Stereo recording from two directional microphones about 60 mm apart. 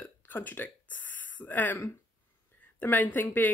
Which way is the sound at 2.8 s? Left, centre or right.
Left.